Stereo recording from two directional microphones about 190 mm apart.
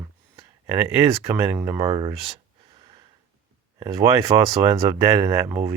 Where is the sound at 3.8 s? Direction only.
15° right (ahead or behind).